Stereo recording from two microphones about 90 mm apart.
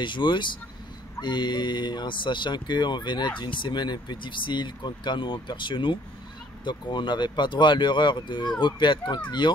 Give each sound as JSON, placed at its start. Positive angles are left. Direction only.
{"t": 0.0, "sound": "speech", "side_deg": 60}